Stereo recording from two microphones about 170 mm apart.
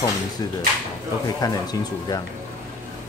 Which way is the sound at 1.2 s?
25° left (ahead or behind).